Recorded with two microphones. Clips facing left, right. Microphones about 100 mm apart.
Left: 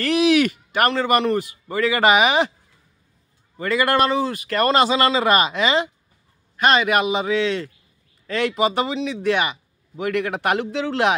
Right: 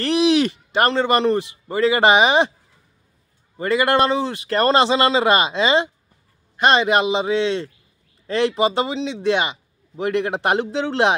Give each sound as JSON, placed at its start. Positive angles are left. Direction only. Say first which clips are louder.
{"t": 0.0, "sound": "a man's voice", "louder": "even", "side_deg": -30}
{"t": 3.5, "sound": "a man's voice", "louder": "right 2 dB", "side_deg": -25}